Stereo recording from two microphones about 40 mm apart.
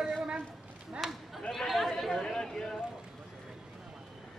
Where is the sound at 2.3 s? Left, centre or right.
Centre.